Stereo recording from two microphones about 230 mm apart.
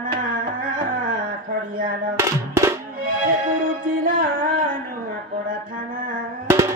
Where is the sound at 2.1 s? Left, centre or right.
Centre.